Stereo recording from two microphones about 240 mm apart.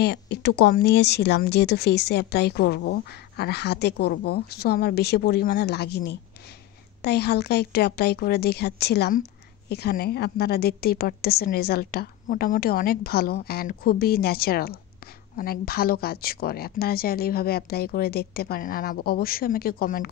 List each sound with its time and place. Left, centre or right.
0.0 s a woman's voice: left